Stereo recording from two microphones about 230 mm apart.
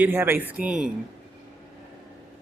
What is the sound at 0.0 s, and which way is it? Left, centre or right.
Speech, centre.